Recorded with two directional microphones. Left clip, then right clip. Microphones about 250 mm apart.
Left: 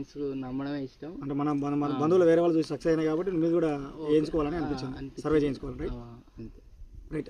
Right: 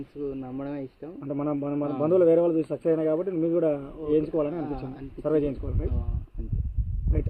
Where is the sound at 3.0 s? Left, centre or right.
Right.